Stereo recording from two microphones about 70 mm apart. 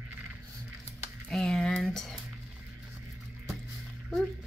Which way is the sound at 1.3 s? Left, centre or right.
Centre.